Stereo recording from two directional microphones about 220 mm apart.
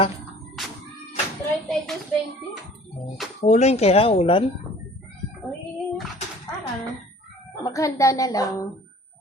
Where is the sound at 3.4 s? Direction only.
30° left (ahead or behind).